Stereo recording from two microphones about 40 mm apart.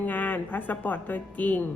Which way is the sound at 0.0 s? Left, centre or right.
Left.